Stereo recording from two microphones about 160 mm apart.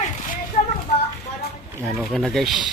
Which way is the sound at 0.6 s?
50° left (ahead or behind).